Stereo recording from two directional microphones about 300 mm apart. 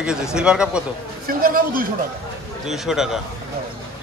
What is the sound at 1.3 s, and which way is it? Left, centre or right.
Speech, right.